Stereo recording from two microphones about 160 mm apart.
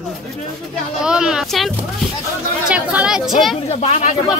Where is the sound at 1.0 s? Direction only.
5° right (ahead or behind).